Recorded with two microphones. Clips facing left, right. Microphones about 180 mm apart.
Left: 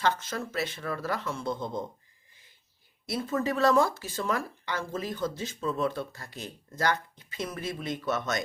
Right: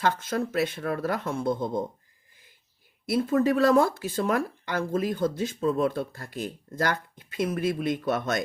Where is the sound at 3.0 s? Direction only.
55° right (ahead or behind).